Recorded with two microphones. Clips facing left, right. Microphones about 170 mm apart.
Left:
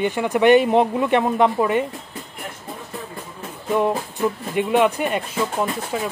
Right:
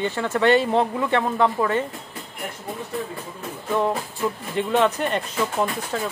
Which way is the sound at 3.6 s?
15° left (ahead or behind).